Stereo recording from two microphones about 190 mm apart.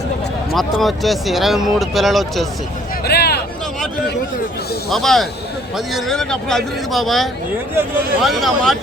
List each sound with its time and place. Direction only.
0.5 s speech: centre (ahead or behind)
3.0 s a sound: 55° left (ahead or behind)
4.9 s speech: centre (ahead or behind)